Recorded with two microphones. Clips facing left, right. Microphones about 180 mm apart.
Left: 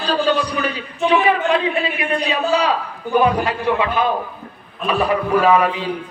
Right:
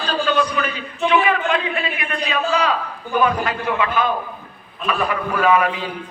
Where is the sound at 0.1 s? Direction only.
35° left (ahead or behind).